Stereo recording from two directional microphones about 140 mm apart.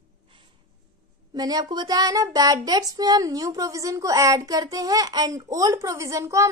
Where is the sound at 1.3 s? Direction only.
30° right (ahead or behind).